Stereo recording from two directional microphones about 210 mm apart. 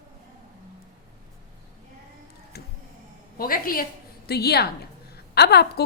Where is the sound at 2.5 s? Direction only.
50° left (ahead or behind).